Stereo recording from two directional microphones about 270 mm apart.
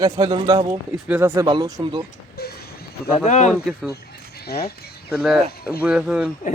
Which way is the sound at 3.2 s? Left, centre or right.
Left.